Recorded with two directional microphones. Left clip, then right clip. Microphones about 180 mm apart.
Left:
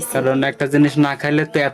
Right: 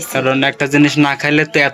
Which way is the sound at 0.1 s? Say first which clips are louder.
Right 3 dB; 10° left (ahead or behind).